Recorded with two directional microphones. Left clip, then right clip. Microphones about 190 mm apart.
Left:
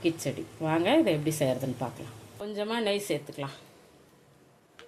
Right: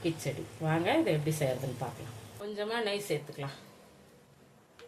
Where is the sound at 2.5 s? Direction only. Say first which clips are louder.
Left 4 dB; 40° left (ahead or behind).